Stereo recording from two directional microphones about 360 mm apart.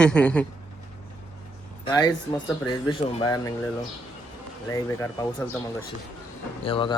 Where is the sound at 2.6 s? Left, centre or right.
Centre.